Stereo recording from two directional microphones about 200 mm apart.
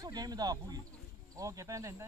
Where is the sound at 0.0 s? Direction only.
20° right (ahead or behind).